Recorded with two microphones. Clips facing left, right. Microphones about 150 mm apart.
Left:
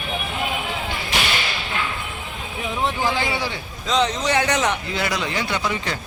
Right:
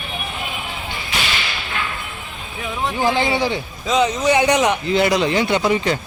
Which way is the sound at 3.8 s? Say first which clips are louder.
Right 3 dB; 5° right (ahead or behind).